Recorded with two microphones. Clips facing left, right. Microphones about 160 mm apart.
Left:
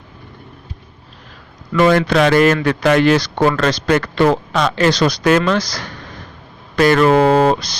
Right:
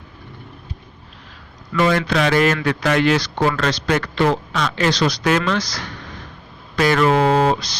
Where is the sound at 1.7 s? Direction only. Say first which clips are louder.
Left 5 dB; 45° left (ahead or behind).